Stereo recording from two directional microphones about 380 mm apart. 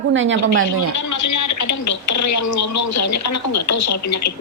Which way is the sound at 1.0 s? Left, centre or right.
Left.